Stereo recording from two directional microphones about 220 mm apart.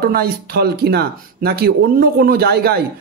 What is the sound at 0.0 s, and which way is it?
A man's voice, 45° right (ahead or behind).